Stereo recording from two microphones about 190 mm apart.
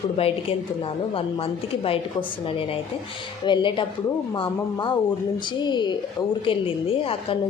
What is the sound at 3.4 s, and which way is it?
Speech, 25° left (ahead or behind).